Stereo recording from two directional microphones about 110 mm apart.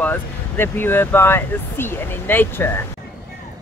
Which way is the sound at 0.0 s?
20° left (ahead or behind).